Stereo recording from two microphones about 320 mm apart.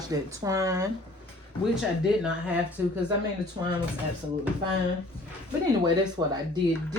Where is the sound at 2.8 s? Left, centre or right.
Centre.